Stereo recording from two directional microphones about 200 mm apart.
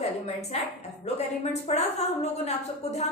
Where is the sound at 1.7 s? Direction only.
35° left (ahead or behind).